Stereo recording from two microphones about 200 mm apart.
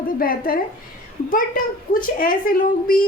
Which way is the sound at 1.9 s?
45° left (ahead or behind).